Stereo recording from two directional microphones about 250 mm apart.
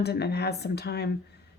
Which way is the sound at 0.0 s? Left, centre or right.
Left.